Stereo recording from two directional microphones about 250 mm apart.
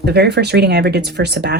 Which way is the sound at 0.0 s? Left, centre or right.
Right.